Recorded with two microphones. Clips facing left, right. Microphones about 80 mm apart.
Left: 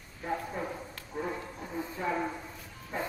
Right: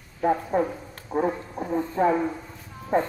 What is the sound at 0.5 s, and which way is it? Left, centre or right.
Speech, right.